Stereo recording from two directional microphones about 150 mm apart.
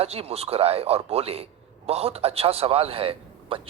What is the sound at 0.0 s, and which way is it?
Speech, 45° right (ahead or behind).